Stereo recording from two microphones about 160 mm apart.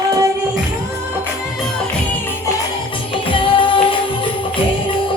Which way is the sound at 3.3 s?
35° left (ahead or behind).